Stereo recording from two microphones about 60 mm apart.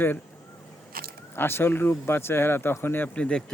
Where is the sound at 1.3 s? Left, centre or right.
Left.